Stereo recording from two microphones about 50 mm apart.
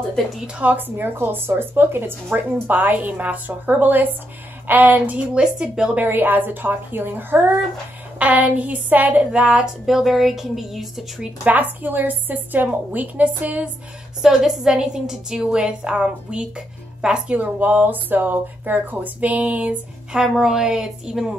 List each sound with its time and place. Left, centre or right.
0.6 s speech: right
3.0 s speech: right
5.3 s a woman's voice: centre
6.0 s speech: right
8.2 s speech: right
9.2 s a woman's voice: centre
9.8 s speech: centre
11.4 s speech: right
14.2 s a woman's voice: centre
17.4 s speech: right
20.1 s a woman's voice: centre